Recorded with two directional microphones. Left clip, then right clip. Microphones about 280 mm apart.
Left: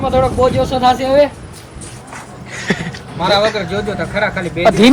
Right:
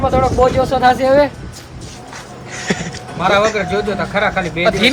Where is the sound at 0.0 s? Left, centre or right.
Centre.